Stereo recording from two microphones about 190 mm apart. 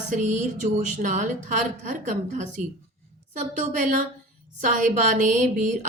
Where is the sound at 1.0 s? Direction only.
40° right (ahead or behind).